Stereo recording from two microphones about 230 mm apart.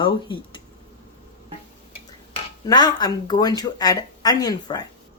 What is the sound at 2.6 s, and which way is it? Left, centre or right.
Speech, centre.